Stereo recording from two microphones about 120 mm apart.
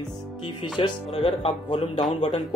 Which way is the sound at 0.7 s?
45° left (ahead or behind).